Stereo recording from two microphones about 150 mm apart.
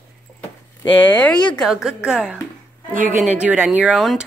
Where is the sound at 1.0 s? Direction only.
10° left (ahead or behind); by 2.3 s 5° right (ahead or behind).